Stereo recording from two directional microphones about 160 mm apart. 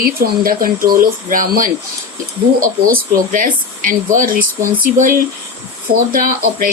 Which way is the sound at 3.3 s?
60° right (ahead or behind).